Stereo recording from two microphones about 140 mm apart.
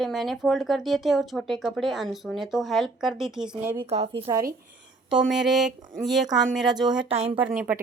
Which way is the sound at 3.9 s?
45° right (ahead or behind).